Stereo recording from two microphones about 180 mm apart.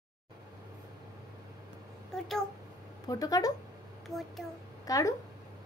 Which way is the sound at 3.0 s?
20° left (ahead or behind).